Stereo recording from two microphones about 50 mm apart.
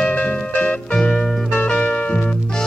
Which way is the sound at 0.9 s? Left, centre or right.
Centre.